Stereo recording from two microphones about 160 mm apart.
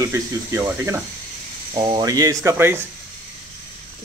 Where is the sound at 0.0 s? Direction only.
20° right (ahead or behind).